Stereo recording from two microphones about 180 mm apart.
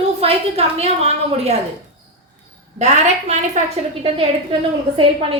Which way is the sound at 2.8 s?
40° right (ahead or behind).